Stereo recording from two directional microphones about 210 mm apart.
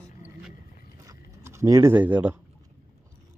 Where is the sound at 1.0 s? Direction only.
15° right (ahead or behind).